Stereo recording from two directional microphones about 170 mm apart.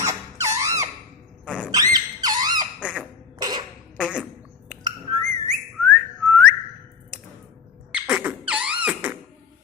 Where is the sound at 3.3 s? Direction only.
25° right (ahead or behind).